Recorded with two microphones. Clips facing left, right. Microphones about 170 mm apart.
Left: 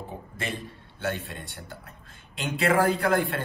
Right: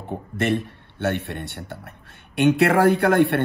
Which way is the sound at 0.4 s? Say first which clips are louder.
Right 13 dB; 65° right (ahead or behind).